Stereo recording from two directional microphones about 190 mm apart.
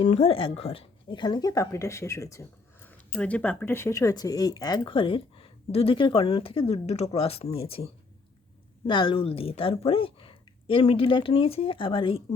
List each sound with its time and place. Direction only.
0.0 s speech: 35° left (ahead or behind)
8.9 s speech: 25° left (ahead or behind)